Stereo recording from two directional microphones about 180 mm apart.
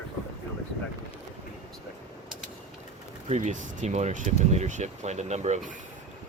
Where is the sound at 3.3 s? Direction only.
40° right (ahead or behind).